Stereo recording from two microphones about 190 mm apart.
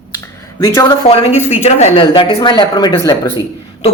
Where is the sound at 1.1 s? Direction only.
30° left (ahead or behind).